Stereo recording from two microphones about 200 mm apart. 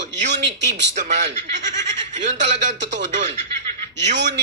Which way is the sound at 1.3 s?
35° right (ahead or behind).